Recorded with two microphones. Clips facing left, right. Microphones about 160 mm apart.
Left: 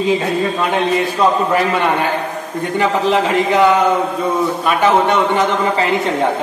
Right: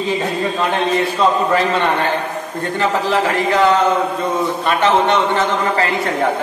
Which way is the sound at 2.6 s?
15° left (ahead or behind).